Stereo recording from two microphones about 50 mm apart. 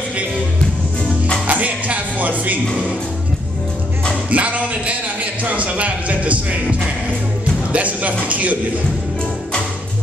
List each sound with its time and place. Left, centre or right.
1.5 s music: right
4.3 s a sound: right
7.7 s speech: right